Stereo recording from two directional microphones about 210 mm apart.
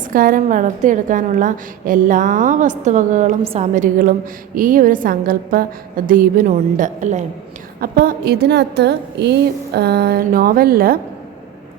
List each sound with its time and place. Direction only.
0.1 s a woman's voice: 40° right (ahead or behind)
7.8 s a woman's voice: 45° right (ahead or behind)